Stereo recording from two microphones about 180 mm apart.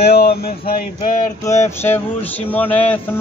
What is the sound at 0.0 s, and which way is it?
Speech, 60° left (ahead or behind).